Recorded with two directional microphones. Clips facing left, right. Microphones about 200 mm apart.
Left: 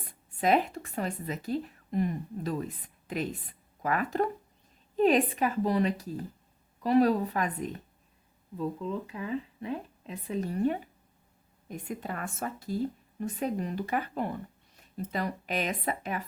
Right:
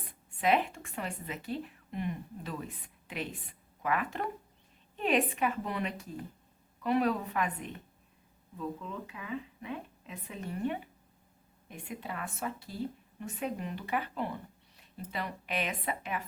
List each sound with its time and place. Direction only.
0.3 s a woman's voice: 40° left (ahead or behind)